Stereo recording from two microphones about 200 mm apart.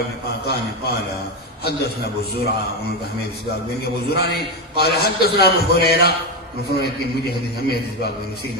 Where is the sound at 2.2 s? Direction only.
55° left (ahead or behind).